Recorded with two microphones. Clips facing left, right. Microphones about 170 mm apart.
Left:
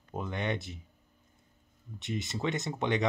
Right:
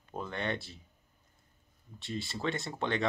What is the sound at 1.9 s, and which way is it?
Speech, 20° left (ahead or behind).